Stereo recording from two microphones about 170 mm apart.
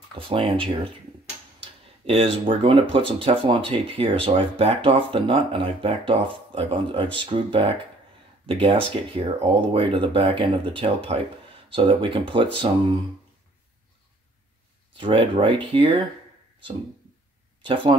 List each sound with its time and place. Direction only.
0.3 s speech: 30° right (ahead or behind)
15.0 s speech: 30° right (ahead or behind)
17.6 s speech: 30° right (ahead or behind)